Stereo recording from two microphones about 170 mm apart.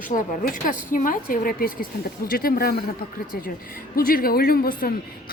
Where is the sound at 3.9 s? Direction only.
60° left (ahead or behind).